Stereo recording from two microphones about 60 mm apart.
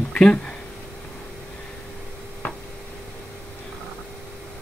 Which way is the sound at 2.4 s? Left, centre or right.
Left.